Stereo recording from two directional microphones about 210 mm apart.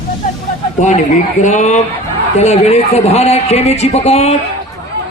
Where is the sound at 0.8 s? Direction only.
35° left (ahead or behind).